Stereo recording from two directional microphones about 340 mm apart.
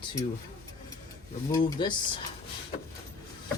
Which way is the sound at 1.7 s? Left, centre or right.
Centre.